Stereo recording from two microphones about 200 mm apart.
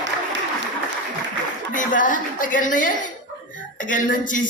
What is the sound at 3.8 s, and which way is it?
Speech, 40° left (ahead or behind).